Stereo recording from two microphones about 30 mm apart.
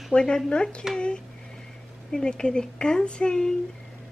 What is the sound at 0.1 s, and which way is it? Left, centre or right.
A woman's voice, left.